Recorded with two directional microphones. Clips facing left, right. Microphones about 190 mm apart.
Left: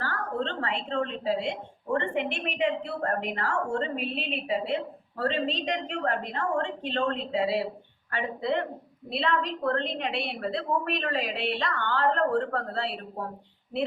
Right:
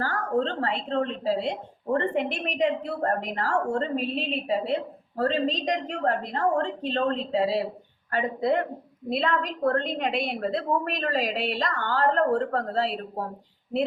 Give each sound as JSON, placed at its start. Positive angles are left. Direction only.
{"t": 0.0, "sound": "a woman's voice", "side_deg": -45}